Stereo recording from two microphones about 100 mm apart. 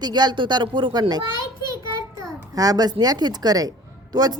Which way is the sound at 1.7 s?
35° right (ahead or behind).